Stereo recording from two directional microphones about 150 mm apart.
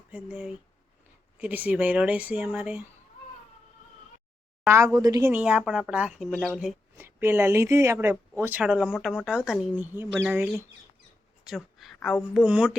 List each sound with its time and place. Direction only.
0.1 s speech: 10° right (ahead or behind)
4.6 s a woman's voice: 20° right (ahead or behind)
5.3 s speech: 10° right (ahead or behind)
6.9 s speech: 15° right (ahead or behind)
11.4 s a sound: centre (ahead or behind)
11.9 s speech: 5° left (ahead or behind)